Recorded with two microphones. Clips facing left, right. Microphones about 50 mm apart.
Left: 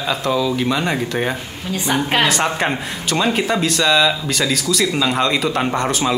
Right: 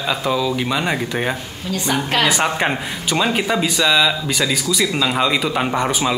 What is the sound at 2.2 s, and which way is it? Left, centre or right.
Speech, centre.